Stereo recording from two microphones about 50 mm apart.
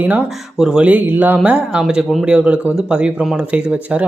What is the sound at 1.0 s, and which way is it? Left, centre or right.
Mantra, right.